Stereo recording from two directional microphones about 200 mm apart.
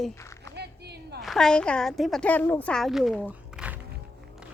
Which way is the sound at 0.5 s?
55° right (ahead or behind).